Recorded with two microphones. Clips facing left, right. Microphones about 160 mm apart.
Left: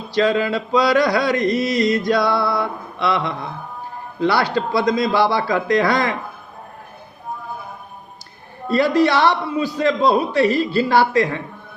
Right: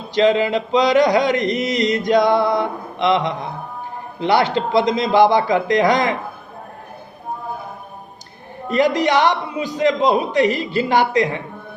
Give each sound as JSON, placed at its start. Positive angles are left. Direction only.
{"t": 0.1, "sound": "mantra", "side_deg": -20}
{"t": 8.7, "sound": "mantra", "side_deg": -20}